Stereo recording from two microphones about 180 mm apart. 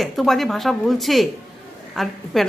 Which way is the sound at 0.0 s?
Centre (ahead or behind).